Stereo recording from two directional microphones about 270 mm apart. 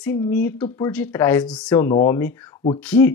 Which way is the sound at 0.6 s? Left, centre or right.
Centre.